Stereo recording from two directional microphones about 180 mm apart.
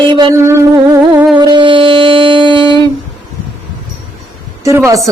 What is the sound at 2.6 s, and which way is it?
Humming, 20° left (ahead or behind).